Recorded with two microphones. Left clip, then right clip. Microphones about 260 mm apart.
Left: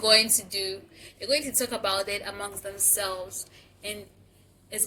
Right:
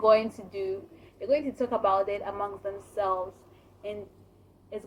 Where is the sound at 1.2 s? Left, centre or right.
Left.